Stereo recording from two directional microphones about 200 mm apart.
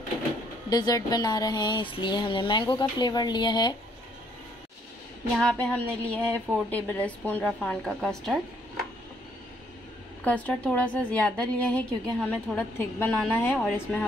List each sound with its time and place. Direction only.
0.7 s speech: 20° left (ahead or behind)
5.3 s a woman's voice: 5° left (ahead or behind)
10.2 s a woman's voice: 5° left (ahead or behind)